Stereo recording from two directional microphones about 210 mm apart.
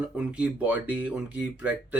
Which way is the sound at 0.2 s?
5° right (ahead or behind).